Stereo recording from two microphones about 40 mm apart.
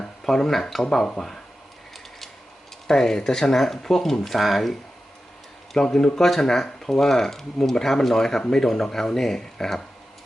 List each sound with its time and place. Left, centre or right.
0.3 s speech: centre
2.8 s speech: centre
5.7 s speech: centre